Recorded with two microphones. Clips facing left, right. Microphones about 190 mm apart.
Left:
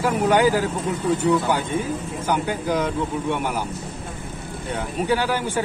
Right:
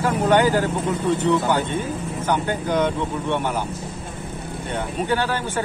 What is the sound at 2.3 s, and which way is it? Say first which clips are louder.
Speech: even; 10° left (ahead or behind).